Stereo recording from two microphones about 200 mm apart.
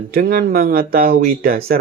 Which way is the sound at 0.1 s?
45° right (ahead or behind).